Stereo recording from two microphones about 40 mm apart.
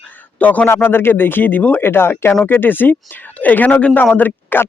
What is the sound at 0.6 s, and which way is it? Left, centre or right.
Speech, left.